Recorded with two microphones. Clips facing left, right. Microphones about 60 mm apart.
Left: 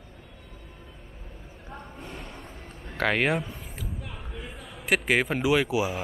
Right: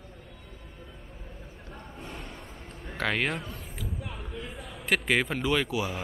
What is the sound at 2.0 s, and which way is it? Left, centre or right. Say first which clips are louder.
A man's voice: left 1 dB; centre.